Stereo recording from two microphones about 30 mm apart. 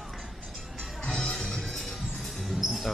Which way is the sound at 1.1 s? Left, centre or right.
Left.